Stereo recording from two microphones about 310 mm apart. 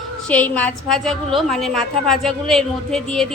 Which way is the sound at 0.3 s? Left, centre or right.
Centre.